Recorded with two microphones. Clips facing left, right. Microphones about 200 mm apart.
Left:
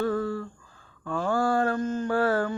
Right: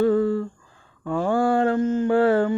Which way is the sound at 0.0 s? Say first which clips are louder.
Right 8 dB; 20° right (ahead or behind).